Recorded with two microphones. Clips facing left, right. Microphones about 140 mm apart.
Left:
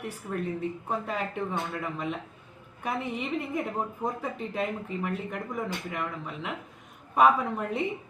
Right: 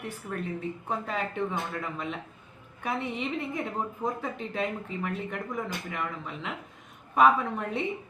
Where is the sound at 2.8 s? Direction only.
Centre (ahead or behind).